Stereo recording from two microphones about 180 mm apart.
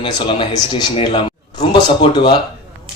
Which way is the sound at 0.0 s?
25° left (ahead or behind).